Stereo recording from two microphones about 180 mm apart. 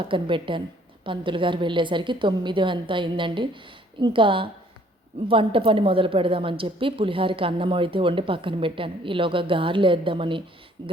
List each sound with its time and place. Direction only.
0.1 s a woman's voice: 30° right (ahead or behind)